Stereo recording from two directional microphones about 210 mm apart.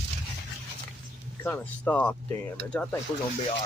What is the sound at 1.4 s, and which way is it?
Speech, 10° left (ahead or behind).